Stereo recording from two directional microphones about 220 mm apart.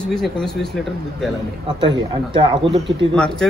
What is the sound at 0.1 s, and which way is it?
Speech, centre (ahead or behind).